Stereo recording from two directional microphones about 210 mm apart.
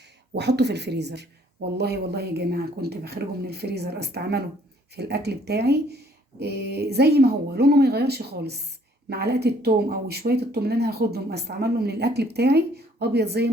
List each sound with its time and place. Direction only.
0.3 s speech: 55° right (ahead or behind)